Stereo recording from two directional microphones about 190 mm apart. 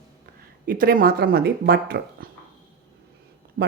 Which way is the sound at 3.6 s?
50° right (ahead or behind).